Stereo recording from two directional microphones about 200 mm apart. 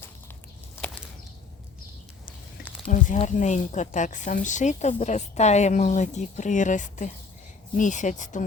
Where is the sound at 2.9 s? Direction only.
40° left (ahead or behind).